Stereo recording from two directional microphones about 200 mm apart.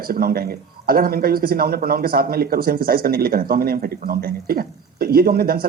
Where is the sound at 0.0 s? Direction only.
50° right (ahead or behind).